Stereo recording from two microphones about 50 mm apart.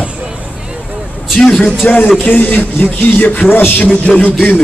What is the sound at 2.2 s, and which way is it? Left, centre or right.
Speech, left.